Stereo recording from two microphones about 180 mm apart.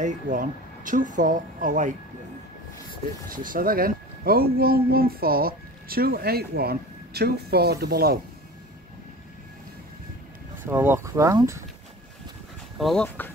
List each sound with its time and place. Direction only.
0.0 s speech: 45° right (ahead or behind)
3.3 s speech: 50° right (ahead or behind)
10.6 s speech: 10° right (ahead or behind)
12.7 s speech: centre (ahead or behind)